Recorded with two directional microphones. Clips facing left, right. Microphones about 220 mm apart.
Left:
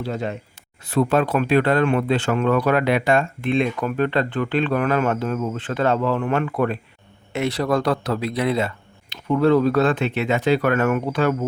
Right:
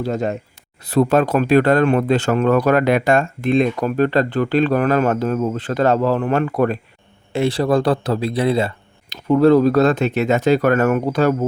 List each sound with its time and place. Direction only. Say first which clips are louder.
0.0 s speech: right 5 dB; 45° right (ahead or behind)